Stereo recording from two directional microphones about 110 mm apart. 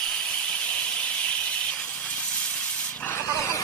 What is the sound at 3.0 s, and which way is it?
Vehicle, 20° left (ahead or behind).